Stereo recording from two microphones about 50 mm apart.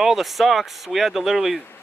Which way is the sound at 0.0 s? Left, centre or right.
Centre.